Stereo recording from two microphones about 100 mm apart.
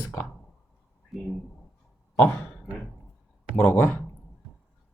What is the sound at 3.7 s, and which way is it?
Speech, 20° left (ahead or behind).